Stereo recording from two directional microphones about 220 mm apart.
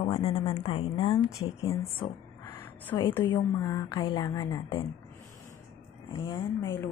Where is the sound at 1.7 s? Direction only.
10° left (ahead or behind).